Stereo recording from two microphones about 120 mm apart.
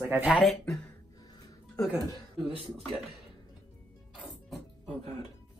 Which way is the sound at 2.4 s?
50° right (ahead or behind).